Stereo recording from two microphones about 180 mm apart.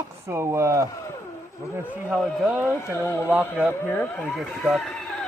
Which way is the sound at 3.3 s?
5° right (ahead or behind).